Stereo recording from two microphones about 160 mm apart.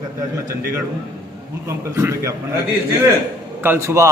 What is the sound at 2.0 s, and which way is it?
Speech, 15° right (ahead or behind).